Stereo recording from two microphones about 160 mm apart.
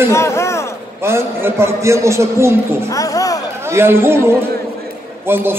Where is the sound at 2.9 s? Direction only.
20° left (ahead or behind).